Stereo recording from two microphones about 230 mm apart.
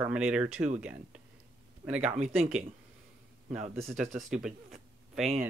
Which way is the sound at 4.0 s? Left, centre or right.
Centre.